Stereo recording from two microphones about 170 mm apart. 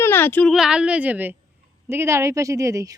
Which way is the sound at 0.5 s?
5° right (ahead or behind).